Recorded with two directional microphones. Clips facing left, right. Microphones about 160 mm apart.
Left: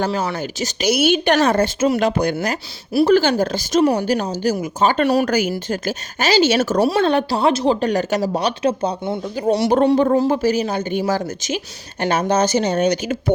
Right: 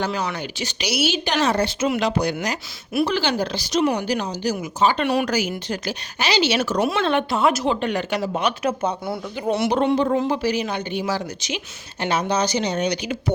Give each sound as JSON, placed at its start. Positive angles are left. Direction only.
{"t": 0.0, "sound": "speech", "side_deg": 40}
{"t": 6.8, "sound": "a woman's voice", "side_deg": 35}